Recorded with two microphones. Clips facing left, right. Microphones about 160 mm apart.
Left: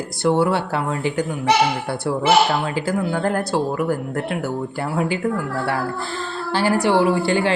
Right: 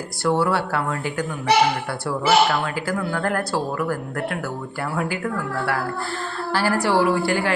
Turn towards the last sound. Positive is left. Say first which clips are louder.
# left 2 dB
turn(degrees=25)  # may be behind; listen again after turning